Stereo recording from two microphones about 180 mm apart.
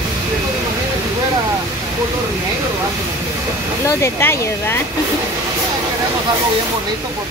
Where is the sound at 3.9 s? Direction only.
15° left (ahead or behind).